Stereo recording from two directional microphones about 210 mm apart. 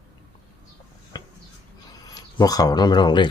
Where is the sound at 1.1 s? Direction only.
20° left (ahead or behind).